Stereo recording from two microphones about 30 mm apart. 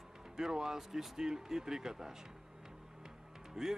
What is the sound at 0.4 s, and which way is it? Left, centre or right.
Speech, centre.